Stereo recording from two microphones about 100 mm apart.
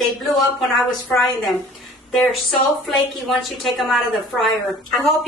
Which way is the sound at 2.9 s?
Centre (ahead or behind).